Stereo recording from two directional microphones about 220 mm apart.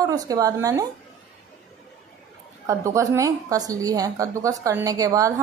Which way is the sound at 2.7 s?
15° right (ahead or behind).